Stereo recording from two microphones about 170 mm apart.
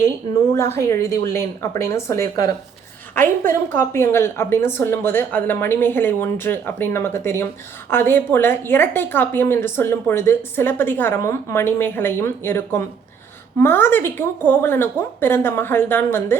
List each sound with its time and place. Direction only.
0.5 s a woman's voice: 15° left (ahead or behind)